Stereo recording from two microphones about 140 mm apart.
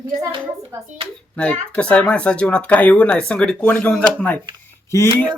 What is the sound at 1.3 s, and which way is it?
Speech, 10° left (ahead or behind).